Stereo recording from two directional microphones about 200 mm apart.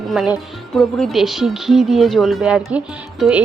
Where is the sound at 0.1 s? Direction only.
Centre (ahead or behind).